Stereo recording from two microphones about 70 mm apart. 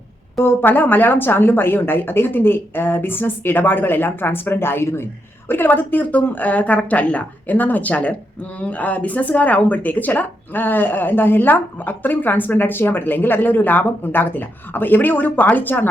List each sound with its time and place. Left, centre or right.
0.3 s speech: left